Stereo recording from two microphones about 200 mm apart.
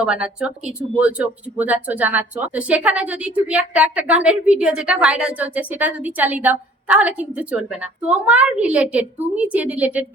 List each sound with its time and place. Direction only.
0.0 s speech: 5° right (ahead or behind)